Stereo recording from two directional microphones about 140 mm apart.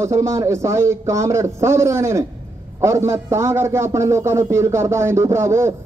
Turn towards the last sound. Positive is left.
turn(degrees=-20)  # may be behind; listen again after turning